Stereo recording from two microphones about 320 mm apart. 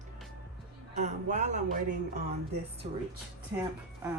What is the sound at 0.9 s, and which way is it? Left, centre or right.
A man's voice, right.